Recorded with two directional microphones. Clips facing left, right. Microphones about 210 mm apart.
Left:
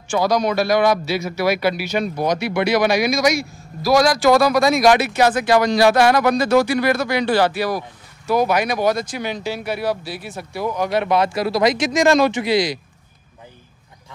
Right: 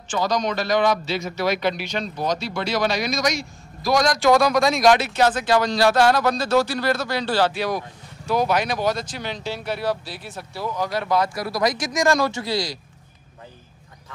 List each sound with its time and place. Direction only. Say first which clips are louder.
0.1 s a man's voice: left 5 dB; 10° left (ahead or behind)
2.3 s speech: left 6 dB; 65° left (ahead or behind)
2.6 s a man's voice: left 7 dB; 15° left (ahead or behind)